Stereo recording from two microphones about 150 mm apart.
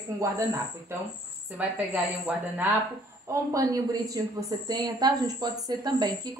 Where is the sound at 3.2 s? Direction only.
20° right (ahead or behind).